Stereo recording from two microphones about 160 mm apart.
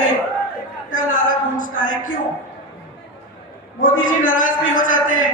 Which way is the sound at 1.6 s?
60° left (ahead or behind).